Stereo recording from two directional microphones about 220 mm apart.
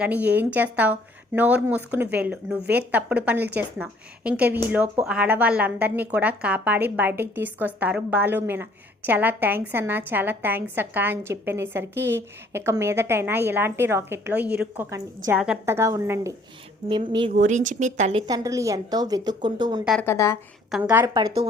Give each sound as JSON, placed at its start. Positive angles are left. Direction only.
{"t": 0.0, "sound": "a woman's voice", "side_deg": -5}
{"t": 17.3, "sound": "a woman's voice", "side_deg": -35}
{"t": 19.8, "sound": "a woman's voice", "side_deg": 0}
{"t": 20.1, "sound": "a woman's voice", "side_deg": 10}
{"t": 20.7, "sound": "a woman's voice", "side_deg": -5}